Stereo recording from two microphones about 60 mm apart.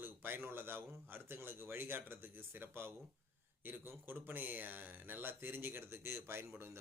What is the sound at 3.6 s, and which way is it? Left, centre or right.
Speech, right.